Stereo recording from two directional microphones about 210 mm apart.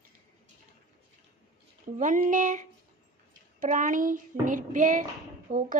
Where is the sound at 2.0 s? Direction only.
40° right (ahead or behind).